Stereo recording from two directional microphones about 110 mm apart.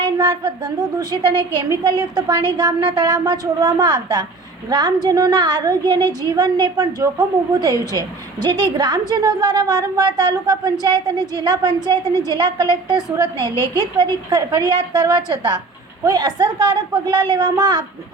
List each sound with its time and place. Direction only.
0.0 s a woman's voice: 40° right (ahead or behind)